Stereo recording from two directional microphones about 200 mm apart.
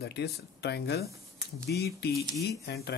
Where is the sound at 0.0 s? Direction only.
55° left (ahead or behind).